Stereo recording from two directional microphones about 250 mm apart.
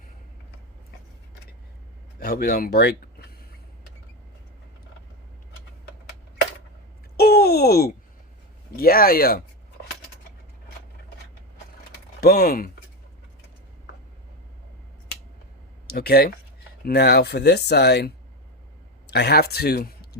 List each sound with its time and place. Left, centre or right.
2.1 s speech: left
7.2 s a sound: left
8.7 s speech: left
12.2 s speech: left
15.9 s speech: left